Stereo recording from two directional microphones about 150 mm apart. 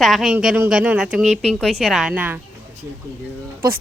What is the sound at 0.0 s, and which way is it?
Speech, centre (ahead or behind).